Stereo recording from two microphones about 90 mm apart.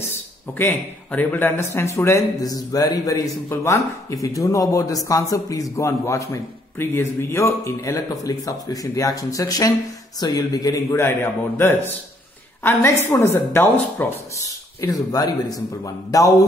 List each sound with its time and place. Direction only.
0.6 s a man's voice: 20° left (ahead or behind)
1.6 s a man's voice: 30° left (ahead or behind)
2.4 s speech: 45° left (ahead or behind)
3.4 s a man's voice: 35° left (ahead or behind)
14.8 s a man's voice: 45° left (ahead or behind)